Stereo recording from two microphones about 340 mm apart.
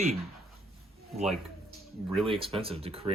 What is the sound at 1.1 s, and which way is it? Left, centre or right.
Speech, centre.